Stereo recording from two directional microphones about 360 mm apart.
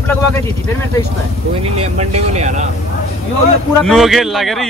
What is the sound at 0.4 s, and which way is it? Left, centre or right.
Speech, centre.